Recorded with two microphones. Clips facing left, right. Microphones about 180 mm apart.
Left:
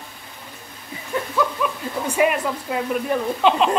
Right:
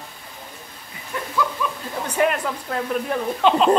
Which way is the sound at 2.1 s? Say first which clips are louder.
Left 1 dB; 5° left (ahead or behind).